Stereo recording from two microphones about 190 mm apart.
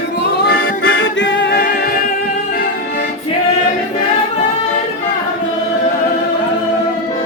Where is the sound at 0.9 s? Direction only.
80° left; by 2.0 s 50° left (ahead or behind).